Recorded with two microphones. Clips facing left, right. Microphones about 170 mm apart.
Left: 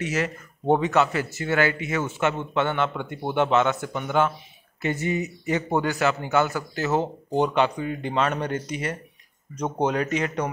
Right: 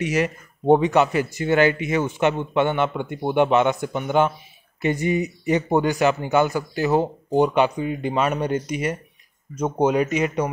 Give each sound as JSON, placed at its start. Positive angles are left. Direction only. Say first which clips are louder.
{"t": 0.0, "sound": "speech", "louder": "right 4 dB", "side_deg": -15}